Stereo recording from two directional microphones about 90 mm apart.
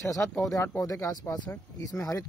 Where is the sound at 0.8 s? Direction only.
40° left (ahead or behind).